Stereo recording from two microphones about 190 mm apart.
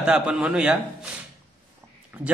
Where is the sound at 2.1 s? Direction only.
10° right (ahead or behind).